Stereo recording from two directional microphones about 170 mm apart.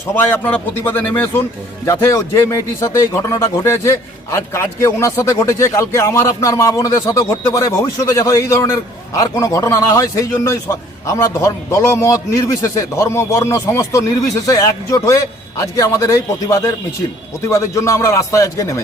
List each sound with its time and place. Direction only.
0.2 s a man's voice: 10° left (ahead or behind)